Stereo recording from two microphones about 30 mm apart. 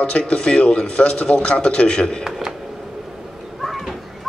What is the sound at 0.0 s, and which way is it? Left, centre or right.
A man's voice, left.